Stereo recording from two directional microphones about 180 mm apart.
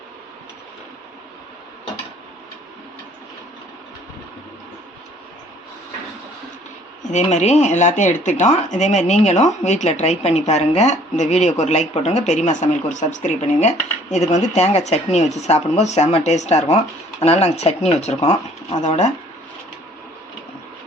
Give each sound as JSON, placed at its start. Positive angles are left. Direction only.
{"t": 7.1, "sound": "speech", "side_deg": 40}